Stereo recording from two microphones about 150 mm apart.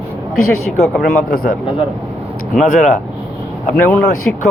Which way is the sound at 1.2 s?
80° left.